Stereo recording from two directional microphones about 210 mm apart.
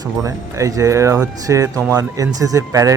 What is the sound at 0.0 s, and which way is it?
A man's voice, 15° right (ahead or behind).